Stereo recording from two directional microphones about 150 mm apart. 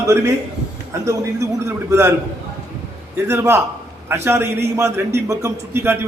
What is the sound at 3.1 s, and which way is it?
A man's voice, 15° right (ahead or behind).